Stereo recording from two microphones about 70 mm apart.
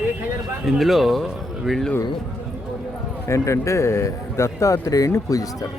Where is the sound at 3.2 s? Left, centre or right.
Left.